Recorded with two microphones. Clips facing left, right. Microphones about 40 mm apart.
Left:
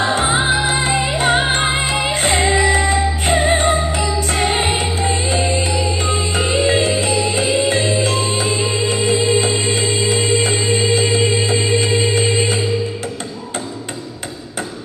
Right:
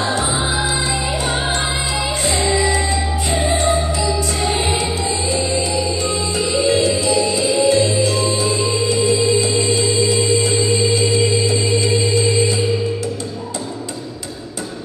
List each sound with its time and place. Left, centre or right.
0.0 s music: left